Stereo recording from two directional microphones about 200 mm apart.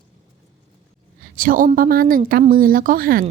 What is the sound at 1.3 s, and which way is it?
A woman's voice, 45° right (ahead or behind).